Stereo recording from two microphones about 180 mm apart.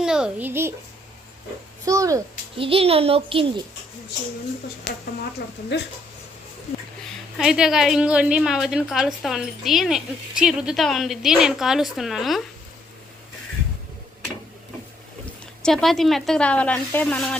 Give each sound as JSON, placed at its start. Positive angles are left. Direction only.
{"t": 0.0, "sound": "a child's voice", "side_deg": -5}
{"t": 1.8, "sound": "a child's voice", "side_deg": -20}
{"t": 2.6, "sound": "a child's voice", "side_deg": -30}
{"t": 5.7, "sound": "speech", "side_deg": 75}
{"t": 7.0, "sound": "a woman's voice", "side_deg": -5}
{"t": 15.6, "sound": "a woman's voice", "side_deg": 0}